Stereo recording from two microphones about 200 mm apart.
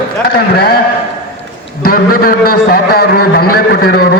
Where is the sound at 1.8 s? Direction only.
50° left (ahead or behind).